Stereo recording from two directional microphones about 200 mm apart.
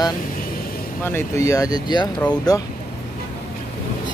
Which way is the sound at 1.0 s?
15° left (ahead or behind).